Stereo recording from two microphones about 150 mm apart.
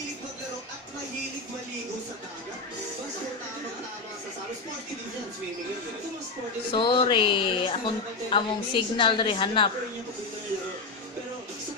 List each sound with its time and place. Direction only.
6.7 s a woman's voice: 35° left (ahead or behind)